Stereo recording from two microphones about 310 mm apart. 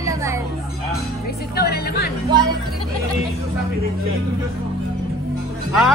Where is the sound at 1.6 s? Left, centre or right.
Left.